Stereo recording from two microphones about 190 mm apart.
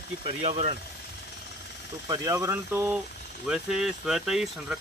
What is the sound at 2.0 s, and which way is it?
Speech, 15° right (ahead or behind).